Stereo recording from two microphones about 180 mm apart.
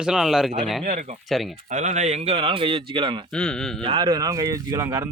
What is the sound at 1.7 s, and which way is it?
Speech, 40° right (ahead or behind).